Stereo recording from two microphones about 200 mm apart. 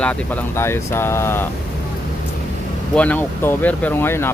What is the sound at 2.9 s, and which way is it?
Speech, 5° left (ahead or behind).